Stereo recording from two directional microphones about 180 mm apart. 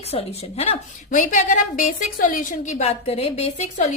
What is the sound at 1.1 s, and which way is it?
A woman's voice, 45° left (ahead or behind).